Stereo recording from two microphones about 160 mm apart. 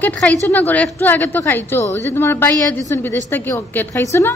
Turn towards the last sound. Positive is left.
turn(degrees=15)  # may be behind; listen again after turning